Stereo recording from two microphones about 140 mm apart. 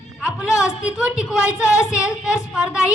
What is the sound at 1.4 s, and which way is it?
Speech, 20° left (ahead or behind).